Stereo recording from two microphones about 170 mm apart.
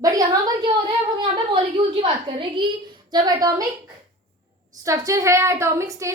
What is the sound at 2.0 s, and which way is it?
A woman's voice, 30° right (ahead or behind).